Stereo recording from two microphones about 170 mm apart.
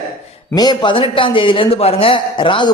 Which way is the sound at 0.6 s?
25° left (ahead or behind).